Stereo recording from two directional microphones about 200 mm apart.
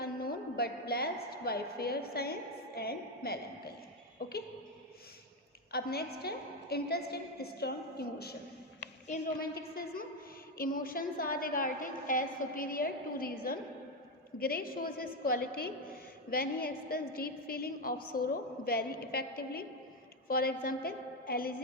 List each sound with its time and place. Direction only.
0.0 s a sound: 50° left (ahead or behind)
4.2 s a woman's voice: 50° left (ahead or behind)
5.7 s a woman's voice: 50° left (ahead or behind)